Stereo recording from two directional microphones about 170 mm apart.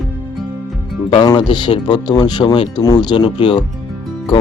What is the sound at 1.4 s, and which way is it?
Speech, 25° left (ahead or behind).